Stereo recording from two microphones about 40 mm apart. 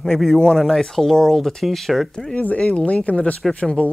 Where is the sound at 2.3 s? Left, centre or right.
Left.